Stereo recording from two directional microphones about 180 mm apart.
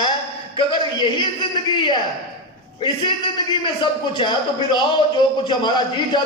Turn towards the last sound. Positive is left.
turn(degrees=25)  # may be behind; listen again after turning